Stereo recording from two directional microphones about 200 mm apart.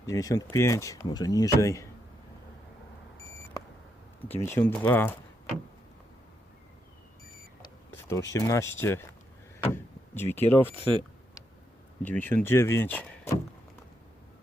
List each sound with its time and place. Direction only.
0.0 s speech: 15° left (ahead or behind)
3.2 s beep: 15° left (ahead or behind)
4.4 s speech: 10° left (ahead or behind)
8.3 s speech: 15° left (ahead or behind)
12.0 s speech: 10° left (ahead or behind)